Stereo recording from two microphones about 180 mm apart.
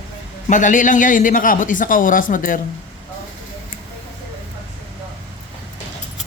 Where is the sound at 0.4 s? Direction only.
45° left (ahead or behind).